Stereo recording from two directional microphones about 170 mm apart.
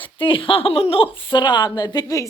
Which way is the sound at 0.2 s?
30° left (ahead or behind).